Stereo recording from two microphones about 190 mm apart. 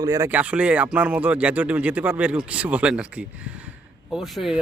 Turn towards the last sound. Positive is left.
turn(degrees=0)  # may be behind; listen again after turning